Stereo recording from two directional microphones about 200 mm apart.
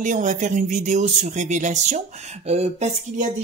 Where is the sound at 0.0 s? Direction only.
40° right (ahead or behind).